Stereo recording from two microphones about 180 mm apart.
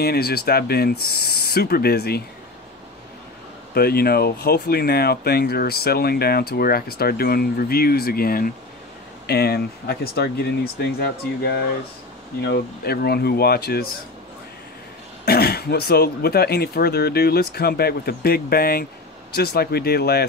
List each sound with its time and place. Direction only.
0.0 s speech: 60° left (ahead or behind)
3.7 s speech: 60° left (ahead or behind)
15.2 s speech: 60° left (ahead or behind)